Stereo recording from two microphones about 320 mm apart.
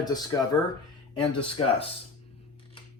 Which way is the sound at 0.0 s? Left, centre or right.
Centre.